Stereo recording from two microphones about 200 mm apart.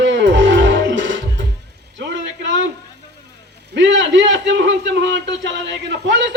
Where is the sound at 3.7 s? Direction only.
65° right (ahead or behind).